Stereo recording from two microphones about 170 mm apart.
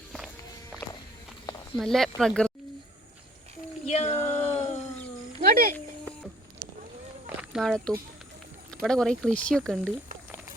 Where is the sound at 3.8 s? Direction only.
40° left (ahead or behind).